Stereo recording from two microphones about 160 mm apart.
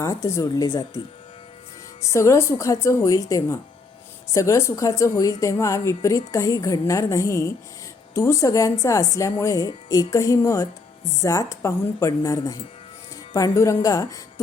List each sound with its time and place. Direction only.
0.0 s a woman's voice: 20° left (ahead or behind)
2.0 s a woman's voice: 20° left (ahead or behind)